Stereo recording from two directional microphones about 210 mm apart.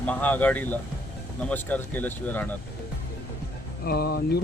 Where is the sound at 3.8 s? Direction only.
50° left (ahead or behind).